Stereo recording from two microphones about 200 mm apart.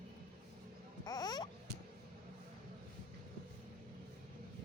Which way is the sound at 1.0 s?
20° left (ahead or behind).